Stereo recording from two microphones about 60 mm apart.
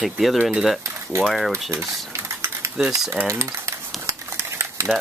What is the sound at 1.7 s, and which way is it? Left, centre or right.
Typing, right.